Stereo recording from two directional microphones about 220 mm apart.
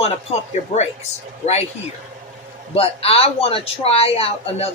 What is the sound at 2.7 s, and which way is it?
Speech, 25° left (ahead or behind).